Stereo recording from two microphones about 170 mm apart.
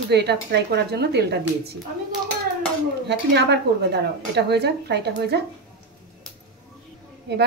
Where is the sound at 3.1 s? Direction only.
80° right.